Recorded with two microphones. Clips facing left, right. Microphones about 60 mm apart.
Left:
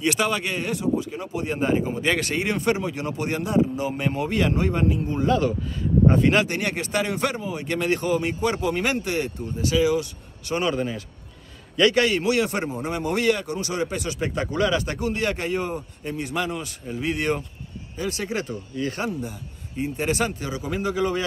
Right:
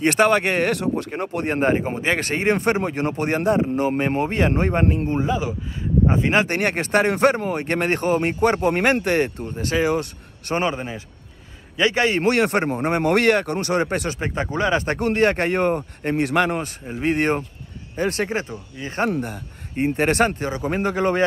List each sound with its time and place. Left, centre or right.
0.0 s speech: right
2.0 s speech: right
5.2 s speech: centre
6.4 s speech: right
10.7 s speech: right
12.2 s speech: right
14.2 s speech: right
15.0 s speech: right
16.8 s speech: right
18.3 s speech: right
19.0 s speech: right